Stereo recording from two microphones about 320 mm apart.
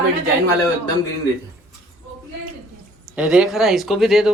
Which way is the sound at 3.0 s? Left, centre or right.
Centre.